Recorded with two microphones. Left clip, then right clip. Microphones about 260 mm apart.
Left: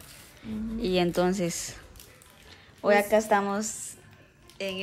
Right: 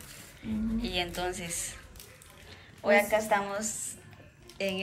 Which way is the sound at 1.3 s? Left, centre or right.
Left.